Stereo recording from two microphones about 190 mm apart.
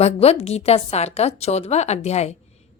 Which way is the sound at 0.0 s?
35° left (ahead or behind).